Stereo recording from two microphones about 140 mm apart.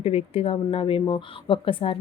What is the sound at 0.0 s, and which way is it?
Speech, 45° left (ahead or behind).